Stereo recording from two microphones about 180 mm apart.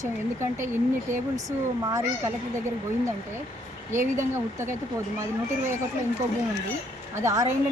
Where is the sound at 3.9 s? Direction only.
15° right (ahead or behind).